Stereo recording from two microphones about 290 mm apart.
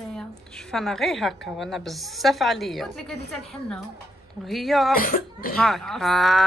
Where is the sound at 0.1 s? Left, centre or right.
Centre.